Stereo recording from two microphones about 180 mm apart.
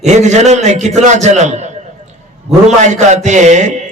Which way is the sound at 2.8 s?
40° right (ahead or behind).